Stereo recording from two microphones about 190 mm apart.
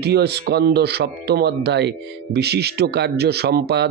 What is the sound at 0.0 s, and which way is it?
Speech, 60° right (ahead or behind).